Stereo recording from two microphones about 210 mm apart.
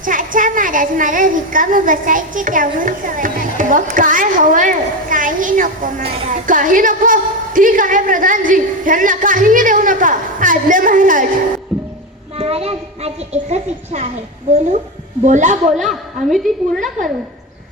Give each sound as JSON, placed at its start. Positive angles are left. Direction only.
{"t": 0.0, "sound": "a woman's voice", "side_deg": -40}
{"t": 12.4, "sound": "a child's voice", "side_deg": -30}
{"t": 15.2, "sound": "a child's voice", "side_deg": -35}
{"t": 15.8, "sound": "a woman's voice", "side_deg": 0}